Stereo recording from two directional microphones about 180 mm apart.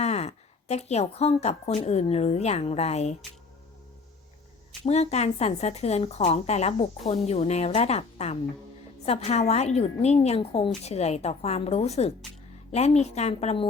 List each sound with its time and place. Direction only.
0.0 s a woman's voice: 35° left (ahead or behind)
4.8 s a woman's voice: 35° left (ahead or behind)